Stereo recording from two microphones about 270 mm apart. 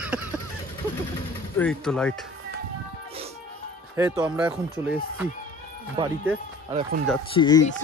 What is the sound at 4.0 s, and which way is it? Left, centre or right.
Speech, centre.